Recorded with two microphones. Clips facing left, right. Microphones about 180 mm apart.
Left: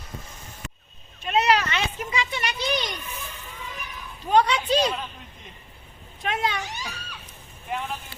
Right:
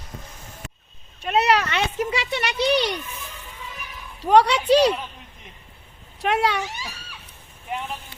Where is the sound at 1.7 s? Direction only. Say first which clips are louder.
Right 4 dB; 70° right (ahead or behind).